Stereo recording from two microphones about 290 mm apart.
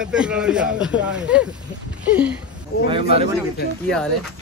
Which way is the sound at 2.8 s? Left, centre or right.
Centre.